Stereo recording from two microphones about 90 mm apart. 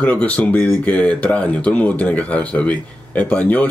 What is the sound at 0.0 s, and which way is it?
A man's voice, 15° left (ahead or behind).